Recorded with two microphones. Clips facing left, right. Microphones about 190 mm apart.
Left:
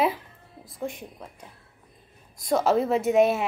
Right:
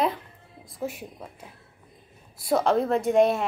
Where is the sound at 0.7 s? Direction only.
5° right (ahead or behind).